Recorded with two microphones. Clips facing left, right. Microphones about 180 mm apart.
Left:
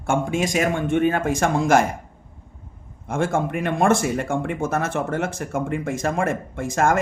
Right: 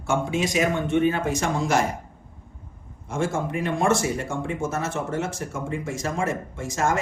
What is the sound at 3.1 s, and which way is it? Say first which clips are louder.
Speech: left 3 dB; 55° left (ahead or behind).